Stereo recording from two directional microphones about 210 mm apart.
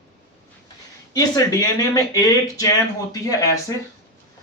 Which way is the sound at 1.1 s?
15° left (ahead or behind).